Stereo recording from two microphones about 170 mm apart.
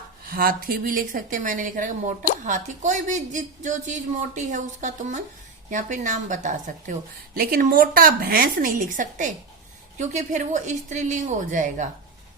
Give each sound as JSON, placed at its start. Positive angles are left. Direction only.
{"t": 0.3, "sound": "a woman's voice", "side_deg": -60}
{"t": 7.3, "sound": "a woman's voice", "side_deg": -60}